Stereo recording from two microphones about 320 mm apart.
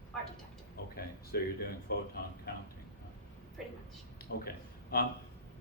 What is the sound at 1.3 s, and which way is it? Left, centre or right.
Speech, left.